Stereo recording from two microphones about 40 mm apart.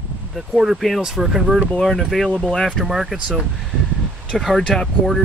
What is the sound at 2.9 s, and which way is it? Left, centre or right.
Speech, centre.